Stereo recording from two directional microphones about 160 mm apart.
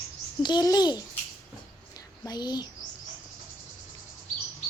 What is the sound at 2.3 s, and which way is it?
Speech, 25° left (ahead or behind).